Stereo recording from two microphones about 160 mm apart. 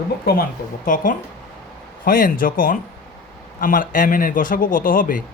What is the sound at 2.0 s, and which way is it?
A man's voice, 60° left (ahead or behind).